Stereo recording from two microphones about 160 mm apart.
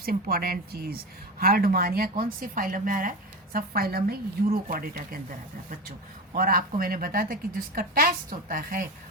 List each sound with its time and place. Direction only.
0.0 s a woman's voice: 70° right (ahead or behind)